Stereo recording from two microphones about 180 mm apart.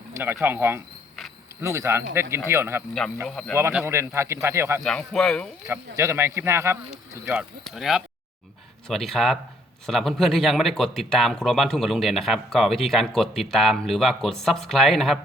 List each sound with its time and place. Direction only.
0.1 s bird: 15° right (ahead or behind)
0.4 s speech: 10° right (ahead or behind)
3.2 s a man's voice: 5° left (ahead or behind)
3.5 s speech: 10° right (ahead or behind)
4.8 s a man's voice: 5° left (ahead or behind)
5.6 s speech: 15° right (ahead or behind)
7.6 s a man's voice: centre (ahead or behind)